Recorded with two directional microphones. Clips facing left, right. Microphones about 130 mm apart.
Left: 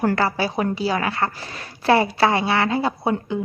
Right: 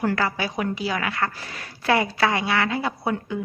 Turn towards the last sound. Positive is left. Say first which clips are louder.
# left 4 dB
turn(degrees=25)  # may be behind; listen again after turning